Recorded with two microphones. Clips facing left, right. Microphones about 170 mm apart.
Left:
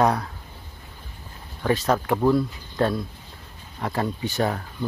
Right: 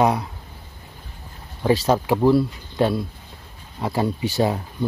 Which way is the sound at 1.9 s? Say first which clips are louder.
Right 2 dB; 10° right (ahead or behind).